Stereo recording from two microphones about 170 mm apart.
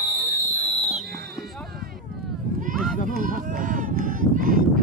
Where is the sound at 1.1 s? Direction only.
65° right (ahead or behind).